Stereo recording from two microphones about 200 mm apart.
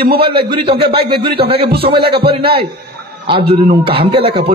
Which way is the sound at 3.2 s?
25° right (ahead or behind).